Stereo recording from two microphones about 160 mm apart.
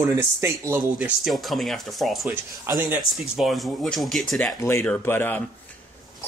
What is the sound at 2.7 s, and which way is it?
Speech, 15° right (ahead or behind).